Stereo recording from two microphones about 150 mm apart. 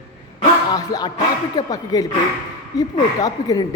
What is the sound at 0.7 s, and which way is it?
A woman's voice, 30° left (ahead or behind).